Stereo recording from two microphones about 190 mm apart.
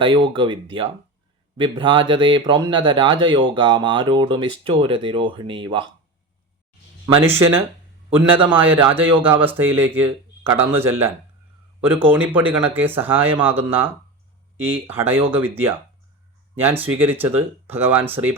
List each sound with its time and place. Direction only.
0.0 s speech: 25° right (ahead or behind)
7.2 s speech: 15° right (ahead or behind)